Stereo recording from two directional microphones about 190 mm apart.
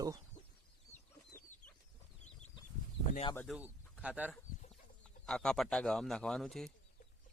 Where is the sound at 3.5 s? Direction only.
5° right (ahead or behind).